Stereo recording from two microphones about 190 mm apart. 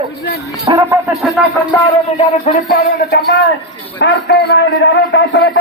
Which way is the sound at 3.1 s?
70° left (ahead or behind).